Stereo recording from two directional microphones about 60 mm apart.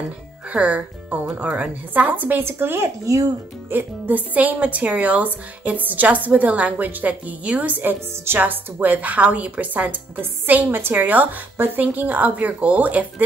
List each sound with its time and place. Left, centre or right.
0.5 s speech: right
3.7 s a woman's voice: right